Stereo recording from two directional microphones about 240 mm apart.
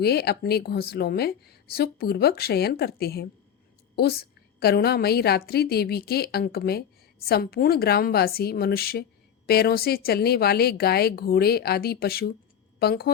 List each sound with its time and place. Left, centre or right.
0.0 s a woman's voice: left